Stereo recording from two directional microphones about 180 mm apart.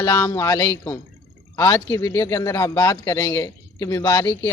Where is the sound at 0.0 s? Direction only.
20° left (ahead or behind).